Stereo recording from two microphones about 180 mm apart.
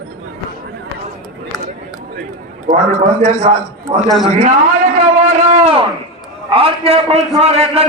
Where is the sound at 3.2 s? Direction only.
45° right (ahead or behind).